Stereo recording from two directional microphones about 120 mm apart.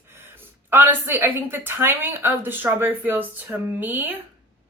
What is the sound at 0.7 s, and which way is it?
Speech, 15° right (ahead or behind).